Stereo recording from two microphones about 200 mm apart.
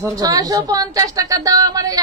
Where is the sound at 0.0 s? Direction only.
15° right (ahead or behind).